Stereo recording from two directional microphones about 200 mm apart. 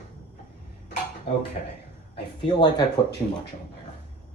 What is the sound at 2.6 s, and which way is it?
Speech, 20° left (ahead or behind).